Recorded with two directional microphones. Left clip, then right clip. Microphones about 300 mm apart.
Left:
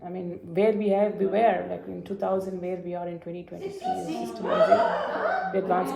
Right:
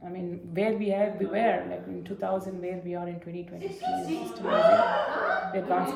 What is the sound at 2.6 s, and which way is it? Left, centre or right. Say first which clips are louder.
Speech: left 2 dB; centre.